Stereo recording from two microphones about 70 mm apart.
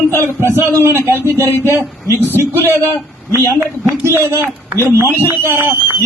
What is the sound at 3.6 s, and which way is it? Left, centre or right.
A woman's voice, right.